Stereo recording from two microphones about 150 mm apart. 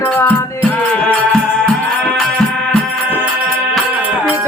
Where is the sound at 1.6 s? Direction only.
Centre (ahead or behind).